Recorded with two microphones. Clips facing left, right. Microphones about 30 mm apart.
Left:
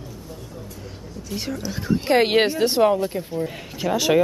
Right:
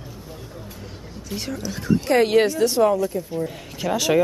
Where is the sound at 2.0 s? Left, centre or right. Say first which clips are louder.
Even; left.